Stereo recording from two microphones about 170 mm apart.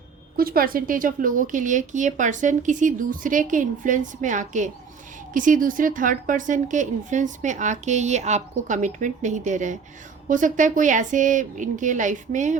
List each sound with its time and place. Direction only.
0.3 s a woman's voice: 60° right (ahead or behind)